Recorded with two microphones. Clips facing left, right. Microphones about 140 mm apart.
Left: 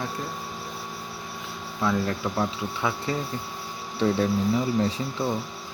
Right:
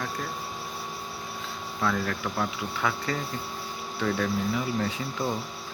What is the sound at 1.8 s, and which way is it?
Speech, 20° left (ahead or behind).